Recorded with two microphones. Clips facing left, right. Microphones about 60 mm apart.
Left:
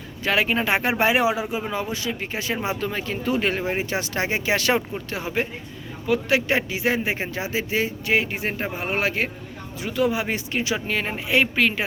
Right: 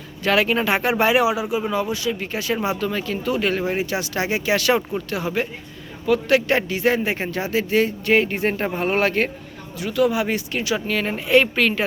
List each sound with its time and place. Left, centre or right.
0.2 s speech: left
9.8 s speech: left